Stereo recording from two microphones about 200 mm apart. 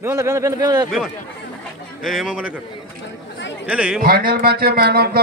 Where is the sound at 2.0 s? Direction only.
5° right (ahead or behind).